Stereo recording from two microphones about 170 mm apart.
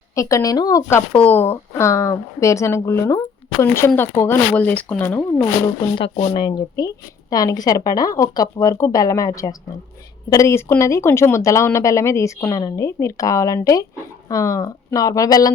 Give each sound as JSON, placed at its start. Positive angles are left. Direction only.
{"t": 0.2, "sound": "speech", "side_deg": 20}
{"t": 6.0, "sound": "a woman's voice", "side_deg": 35}